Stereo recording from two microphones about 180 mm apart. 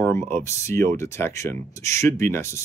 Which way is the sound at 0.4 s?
15° left (ahead or behind).